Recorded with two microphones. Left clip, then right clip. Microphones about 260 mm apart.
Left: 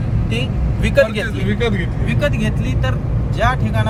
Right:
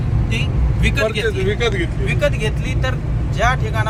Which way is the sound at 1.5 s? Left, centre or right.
Right.